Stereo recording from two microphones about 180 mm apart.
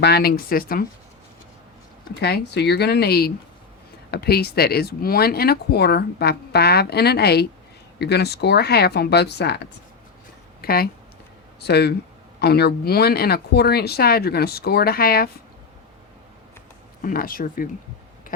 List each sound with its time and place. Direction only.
0.0 s speech: 60° left (ahead or behind)
2.2 s speech: 65° left (ahead or behind)
10.6 s speech: 55° left (ahead or behind)
17.0 s speech: 50° left (ahead or behind)